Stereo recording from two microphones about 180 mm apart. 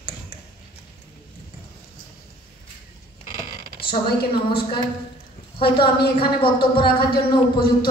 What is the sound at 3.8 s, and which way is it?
Speech, 60° left (ahead or behind).